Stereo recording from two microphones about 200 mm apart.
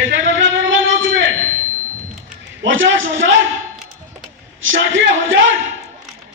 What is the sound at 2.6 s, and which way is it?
Speech, 70° right (ahead or behind).